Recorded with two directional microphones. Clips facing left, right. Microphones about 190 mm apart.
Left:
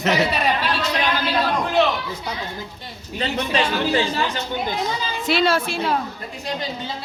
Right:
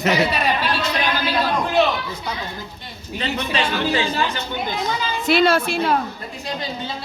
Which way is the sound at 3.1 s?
45° left (ahead or behind).